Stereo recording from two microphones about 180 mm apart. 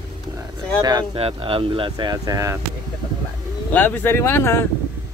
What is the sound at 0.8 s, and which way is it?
Speech, 20° right (ahead or behind).